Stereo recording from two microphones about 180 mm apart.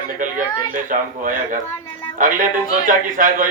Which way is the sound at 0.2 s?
45° right (ahead or behind).